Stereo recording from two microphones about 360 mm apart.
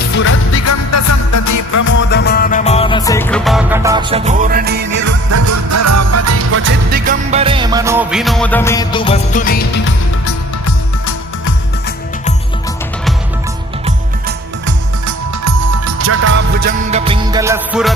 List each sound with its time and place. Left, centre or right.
0.1 s music: left
2.0 s music: left; by 5.1 s right
5.3 s music: right; by 10.3 s left
15.0 s music: right; by 17.9 s centre